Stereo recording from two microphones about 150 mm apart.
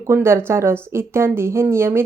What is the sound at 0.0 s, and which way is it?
Speech, 15° right (ahead or behind).